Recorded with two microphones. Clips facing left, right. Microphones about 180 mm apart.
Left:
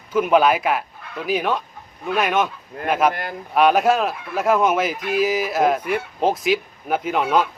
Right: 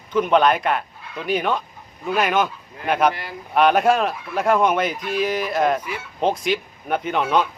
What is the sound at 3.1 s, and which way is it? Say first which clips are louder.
Speech: left 4 dB; 50° left (ahead or behind).